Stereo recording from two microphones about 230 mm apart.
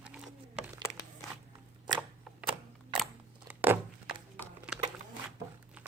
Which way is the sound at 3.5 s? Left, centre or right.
Centre.